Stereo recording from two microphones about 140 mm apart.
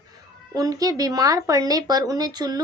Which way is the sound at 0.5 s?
25° right (ahead or behind).